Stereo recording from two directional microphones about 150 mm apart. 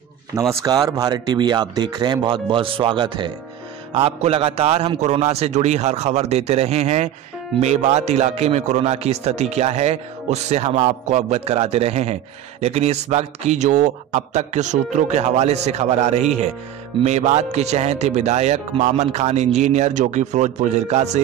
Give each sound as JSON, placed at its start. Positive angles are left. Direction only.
{"t": 0.4, "sound": "speech", "side_deg": -20}